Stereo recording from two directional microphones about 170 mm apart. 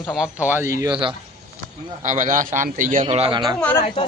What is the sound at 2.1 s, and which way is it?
A man's voice, 50° right (ahead or behind).